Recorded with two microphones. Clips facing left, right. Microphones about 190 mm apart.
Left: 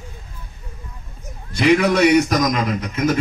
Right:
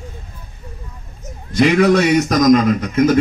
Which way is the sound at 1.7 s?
50° right (ahead or behind).